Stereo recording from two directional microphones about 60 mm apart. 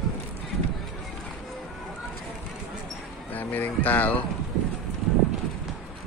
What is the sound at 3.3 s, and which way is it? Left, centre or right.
Speech, left.